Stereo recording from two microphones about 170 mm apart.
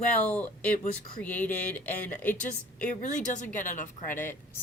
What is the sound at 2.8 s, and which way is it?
A woman's voice, 50° left (ahead or behind).